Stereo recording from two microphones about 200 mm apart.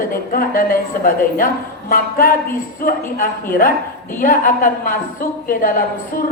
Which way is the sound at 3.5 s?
45° left (ahead or behind).